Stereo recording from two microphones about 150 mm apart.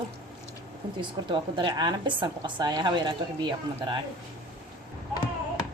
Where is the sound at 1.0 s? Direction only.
30° right (ahead or behind).